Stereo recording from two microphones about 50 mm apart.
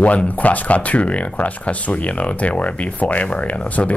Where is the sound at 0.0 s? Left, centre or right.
Left.